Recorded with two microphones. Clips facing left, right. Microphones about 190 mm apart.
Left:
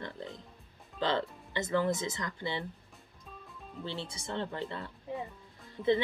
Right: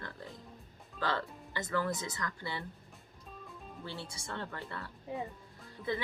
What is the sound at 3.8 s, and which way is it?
A woman's voice, 20° left (ahead or behind).